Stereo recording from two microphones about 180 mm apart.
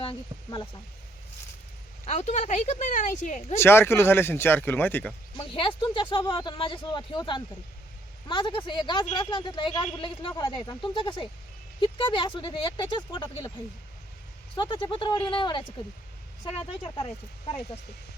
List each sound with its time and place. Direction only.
0.0 s a woman's voice: 30° left (ahead or behind)
2.0 s a woman's voice: 40° left (ahead or behind)
3.6 s speech: 15° left (ahead or behind)
5.4 s a woman's voice: 30° left (ahead or behind)
14.5 s a woman's voice: 25° left (ahead or behind)